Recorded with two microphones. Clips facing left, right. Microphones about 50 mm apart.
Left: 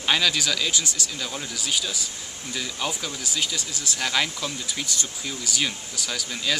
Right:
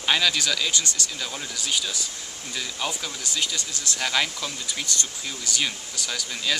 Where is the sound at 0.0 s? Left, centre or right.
Centre.